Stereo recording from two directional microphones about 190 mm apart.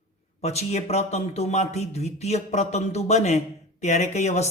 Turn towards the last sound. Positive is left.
turn(degrees=35)  # may be behind; listen again after turning